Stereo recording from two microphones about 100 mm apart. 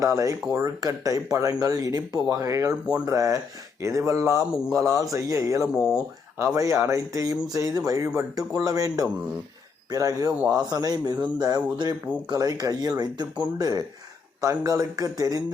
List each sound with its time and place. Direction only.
0.0 s speech: 35° right (ahead or behind)
5.6 s speech: 5° right (ahead or behind)
6.4 s speech: 30° right (ahead or behind)